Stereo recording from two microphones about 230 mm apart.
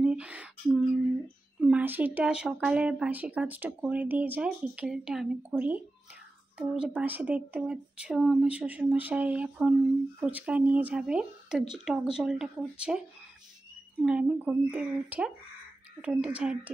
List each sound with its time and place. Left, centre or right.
0.0 s a sound: centre
1.6 s speech: centre
14.0 s speech: centre